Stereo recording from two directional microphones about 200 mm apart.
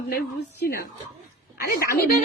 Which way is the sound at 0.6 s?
45° left (ahead or behind).